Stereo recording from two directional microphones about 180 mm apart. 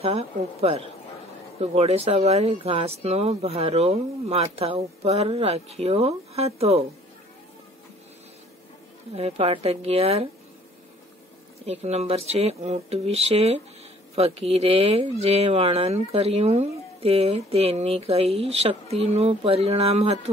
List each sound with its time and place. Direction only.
0.0 s speech: 35° right (ahead or behind)
9.1 s speech: 35° right (ahead or behind)
11.6 s speech: 35° right (ahead or behind)